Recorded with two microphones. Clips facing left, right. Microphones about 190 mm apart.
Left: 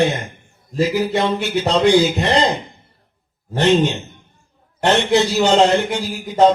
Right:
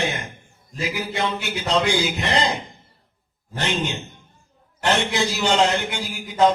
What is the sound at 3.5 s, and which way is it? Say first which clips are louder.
Speech: left 11 dB; 30° left (ahead or behind).